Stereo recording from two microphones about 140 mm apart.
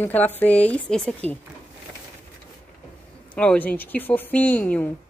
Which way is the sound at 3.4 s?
10° left (ahead or behind).